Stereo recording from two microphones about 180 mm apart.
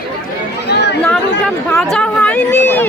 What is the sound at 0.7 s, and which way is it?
Chatter, 70° left (ahead or behind).